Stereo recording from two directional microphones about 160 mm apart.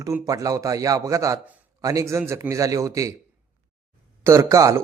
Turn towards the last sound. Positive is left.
turn(degrees=-20)  # may be behind; listen again after turning